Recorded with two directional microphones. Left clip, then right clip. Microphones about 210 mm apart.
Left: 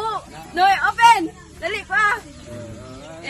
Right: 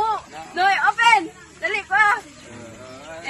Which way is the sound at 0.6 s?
50° left (ahead or behind).